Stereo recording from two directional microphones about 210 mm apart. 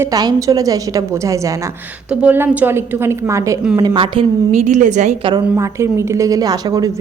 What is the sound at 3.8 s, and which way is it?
A woman's voice, 25° right (ahead or behind).